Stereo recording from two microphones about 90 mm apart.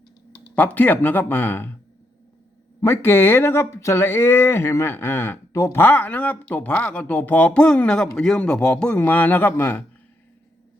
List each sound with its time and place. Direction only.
0.5 s speech: 15° left (ahead or behind)
2.8 s a man's voice: 25° left (ahead or behind)